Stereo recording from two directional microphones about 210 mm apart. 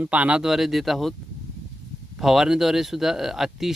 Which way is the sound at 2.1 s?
Centre (ahead or behind).